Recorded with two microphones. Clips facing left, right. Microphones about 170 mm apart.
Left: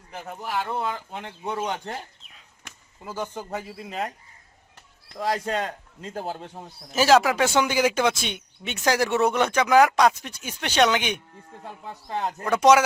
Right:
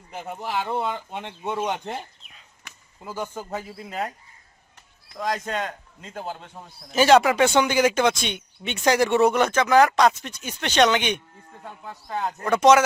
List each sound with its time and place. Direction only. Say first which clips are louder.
0.3 s speech: right 1 dB; 5° right (ahead or behind)
1.8 s chicken: right 2 dB; centre (ahead or behind)
3.2 s speech: even; 10° right (ahead or behind)
5.2 s a man's voice: left 1 dB; 30° left (ahead or behind)
6.9 s speech: right 2 dB; centre (ahead or behind)
9.5 s speech: even; 15° left (ahead or behind)
12.2 s speech: right 1 dB; 5° left (ahead or behind)